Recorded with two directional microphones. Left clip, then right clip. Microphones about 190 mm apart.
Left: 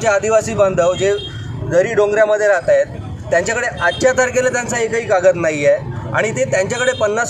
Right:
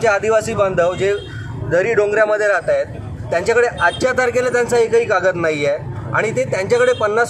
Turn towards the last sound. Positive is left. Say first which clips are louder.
# right 1 dB
turn(degrees=0)  # may be behind; listen again after turning